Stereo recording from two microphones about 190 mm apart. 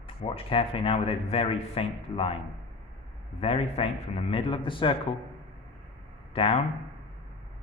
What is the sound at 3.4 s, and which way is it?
A man's voice, 30° left (ahead or behind).